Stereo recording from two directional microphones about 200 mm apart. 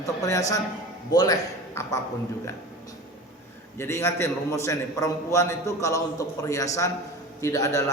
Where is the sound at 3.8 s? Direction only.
15° left (ahead or behind).